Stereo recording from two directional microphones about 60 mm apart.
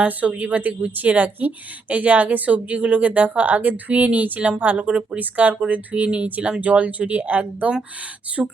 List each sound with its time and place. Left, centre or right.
0.0 s a woman's voice: right
8.4 s speech: centre